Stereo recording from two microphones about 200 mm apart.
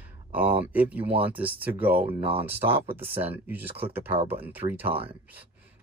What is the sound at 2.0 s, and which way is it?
Speech, 25° right (ahead or behind).